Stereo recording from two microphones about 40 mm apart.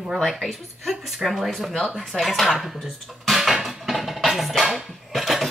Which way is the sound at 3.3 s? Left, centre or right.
Centre.